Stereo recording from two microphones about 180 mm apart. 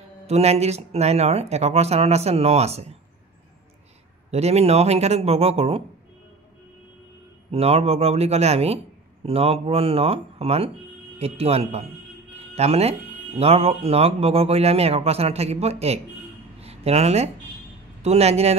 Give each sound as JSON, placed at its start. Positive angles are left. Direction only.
{"t": 0.3, "sound": "speech", "side_deg": -35}
{"t": 4.3, "sound": "speech", "side_deg": -35}
{"t": 7.5, "sound": "speech", "side_deg": -35}